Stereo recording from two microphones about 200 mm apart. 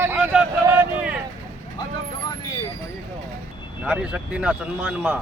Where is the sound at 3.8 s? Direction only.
5° right (ahead or behind).